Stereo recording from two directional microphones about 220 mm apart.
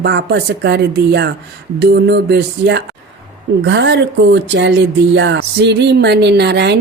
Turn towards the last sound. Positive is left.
turn(degrees=-50)  # may be behind; listen again after turning